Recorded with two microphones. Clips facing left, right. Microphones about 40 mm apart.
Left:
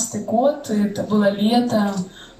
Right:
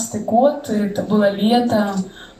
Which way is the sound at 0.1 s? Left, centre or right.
Centre.